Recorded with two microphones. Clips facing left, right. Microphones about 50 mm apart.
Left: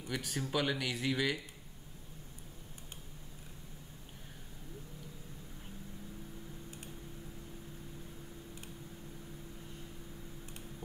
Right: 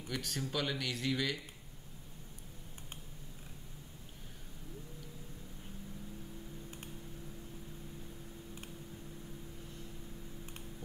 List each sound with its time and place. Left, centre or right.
0.1 s speech: centre